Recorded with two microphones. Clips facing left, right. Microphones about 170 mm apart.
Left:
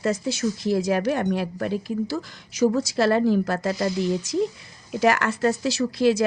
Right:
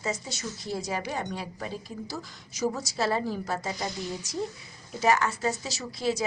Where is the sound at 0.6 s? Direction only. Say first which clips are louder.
Left 10 dB; 75° left (ahead or behind).